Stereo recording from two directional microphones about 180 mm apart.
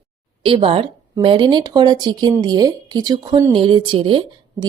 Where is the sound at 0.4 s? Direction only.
30° right (ahead or behind).